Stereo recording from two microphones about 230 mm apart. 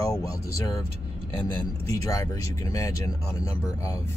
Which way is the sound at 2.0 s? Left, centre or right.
Centre.